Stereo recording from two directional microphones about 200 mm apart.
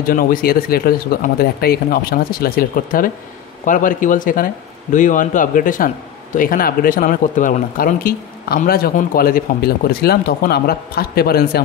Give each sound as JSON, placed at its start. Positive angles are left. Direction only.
{"t": 0.0, "sound": "a man's voice", "side_deg": 45}